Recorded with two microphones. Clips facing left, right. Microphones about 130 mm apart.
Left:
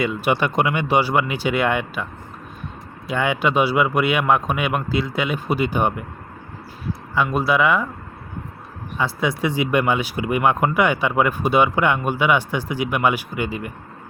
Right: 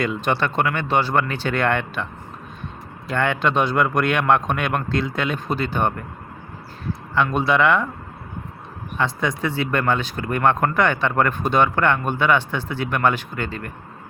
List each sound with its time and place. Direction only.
0.0 s speech: 10° left (ahead or behind)
3.1 s speech: 10° left (ahead or behind)
7.1 s speech: 5° left (ahead or behind)
9.0 s speech: 5° left (ahead or behind)